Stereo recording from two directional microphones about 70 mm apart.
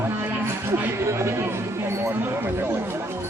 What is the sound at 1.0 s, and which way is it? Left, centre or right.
Speech, right.